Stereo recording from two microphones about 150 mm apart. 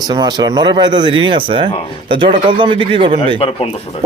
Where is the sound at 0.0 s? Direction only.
30° right (ahead or behind).